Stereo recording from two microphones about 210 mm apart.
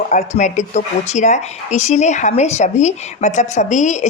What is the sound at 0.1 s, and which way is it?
Speech, 35° left (ahead or behind).